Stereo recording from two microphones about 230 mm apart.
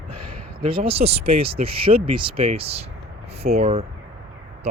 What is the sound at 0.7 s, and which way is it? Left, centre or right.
Speech, right.